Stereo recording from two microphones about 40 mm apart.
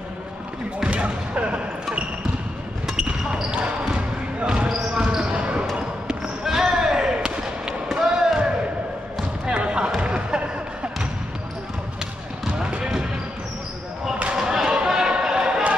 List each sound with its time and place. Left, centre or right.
0.8 s basketball bounce: right
2.9 s basketball bounce: centre
6.4 s basketball bounce: centre
9.5 s basketball bounce: right
9.8 s music: right
12.4 s basketball bounce: right
14.3 s a sound: centre